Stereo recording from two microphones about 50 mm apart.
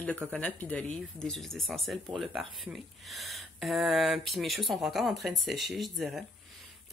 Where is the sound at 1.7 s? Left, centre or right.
Centre.